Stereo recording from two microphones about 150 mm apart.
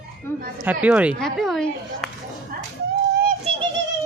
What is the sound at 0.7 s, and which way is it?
Speech, 10° right (ahead or behind).